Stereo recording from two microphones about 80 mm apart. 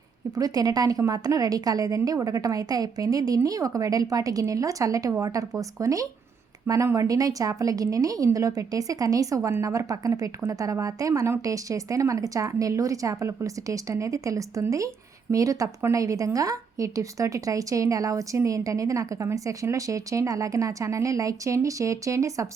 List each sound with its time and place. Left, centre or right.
0.3 s a woman's voice: right